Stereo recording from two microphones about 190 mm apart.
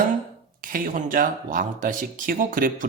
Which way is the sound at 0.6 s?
45° right (ahead or behind).